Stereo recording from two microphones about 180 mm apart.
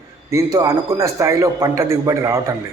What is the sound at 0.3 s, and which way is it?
A man's voice, 20° right (ahead or behind).